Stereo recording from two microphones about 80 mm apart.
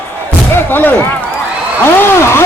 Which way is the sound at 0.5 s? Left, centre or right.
Left.